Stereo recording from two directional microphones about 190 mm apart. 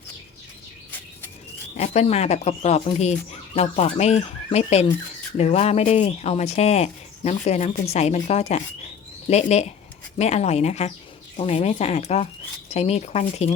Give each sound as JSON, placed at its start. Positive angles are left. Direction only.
{"t": 1.7, "sound": "speech", "side_deg": 35}